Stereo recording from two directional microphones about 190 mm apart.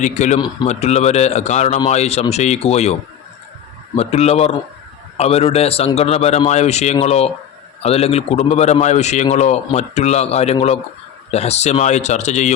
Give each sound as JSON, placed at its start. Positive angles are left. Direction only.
{"t": 0.0, "sound": "a man's voice", "side_deg": 40}
{"t": 3.9, "sound": "a man's voice", "side_deg": 35}